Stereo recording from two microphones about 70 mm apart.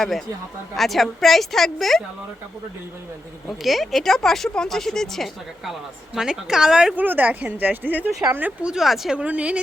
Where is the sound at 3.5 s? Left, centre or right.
Centre.